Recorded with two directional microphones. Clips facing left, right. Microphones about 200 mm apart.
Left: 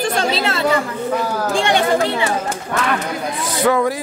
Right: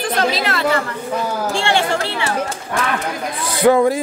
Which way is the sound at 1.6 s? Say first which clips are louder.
Left 4 dB; 15° left (ahead or behind).